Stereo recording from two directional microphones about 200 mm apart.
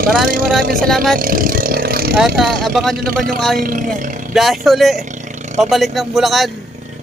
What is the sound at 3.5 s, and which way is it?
Speech, 45° right (ahead or behind).